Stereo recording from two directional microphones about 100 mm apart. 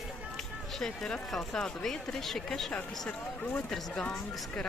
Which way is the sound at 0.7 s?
5° left (ahead or behind).